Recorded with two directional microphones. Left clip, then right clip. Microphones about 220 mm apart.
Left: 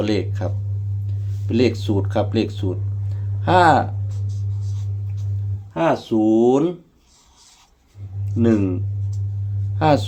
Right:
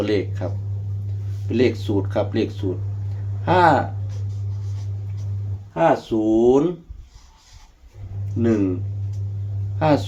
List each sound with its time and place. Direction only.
0.0 s speech: 50° left (ahead or behind)
5.7 s speech: 50° left (ahead or behind)
8.4 s speech: 50° left (ahead or behind)
9.7 s speech: 50° left (ahead or behind)